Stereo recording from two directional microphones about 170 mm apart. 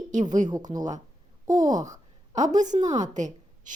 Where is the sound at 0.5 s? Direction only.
20° right (ahead or behind).